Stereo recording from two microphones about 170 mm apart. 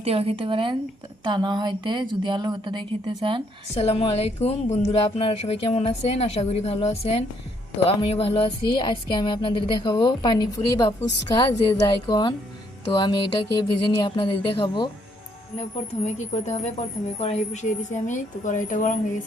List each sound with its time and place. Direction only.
0.0 s speech: 35° right (ahead or behind)
3.8 s a woman's voice: 35° left (ahead or behind)
16.1 s a woman's voice: 40° left (ahead or behind)